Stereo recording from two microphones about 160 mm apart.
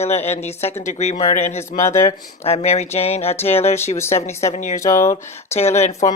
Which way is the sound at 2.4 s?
40° left (ahead or behind).